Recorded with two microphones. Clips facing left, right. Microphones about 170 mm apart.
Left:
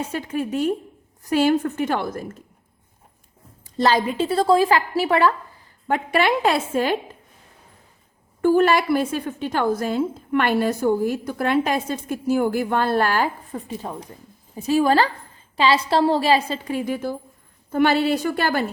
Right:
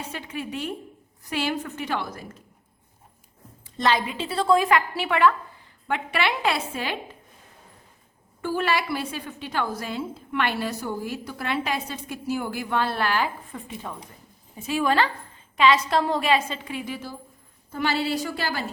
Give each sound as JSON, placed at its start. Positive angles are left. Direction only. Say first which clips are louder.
{"t": 0.1, "sound": "a woman's voice", "louder": "left 8 dB", "side_deg": 45}
{"t": 3.8, "sound": "a woman's voice", "louder": "left 5 dB", "side_deg": 40}
{"t": 8.4, "sound": "a woman's voice", "louder": "left 9 dB", "side_deg": 45}